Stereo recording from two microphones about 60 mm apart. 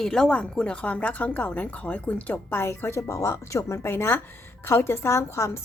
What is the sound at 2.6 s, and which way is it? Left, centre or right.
A woman's voice, left.